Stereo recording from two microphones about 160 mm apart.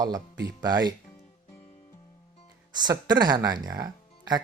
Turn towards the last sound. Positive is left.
turn(degrees=-25)  # may be behind; listen again after turning